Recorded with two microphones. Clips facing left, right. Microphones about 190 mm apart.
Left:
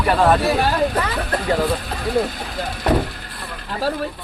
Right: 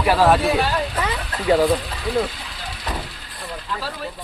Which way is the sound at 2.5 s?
55° left (ahead or behind).